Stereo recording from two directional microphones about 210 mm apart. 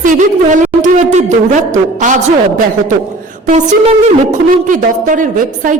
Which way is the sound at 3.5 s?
35° right (ahead or behind).